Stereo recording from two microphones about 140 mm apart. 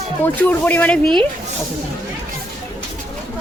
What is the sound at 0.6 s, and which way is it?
Speech, 10° left (ahead or behind).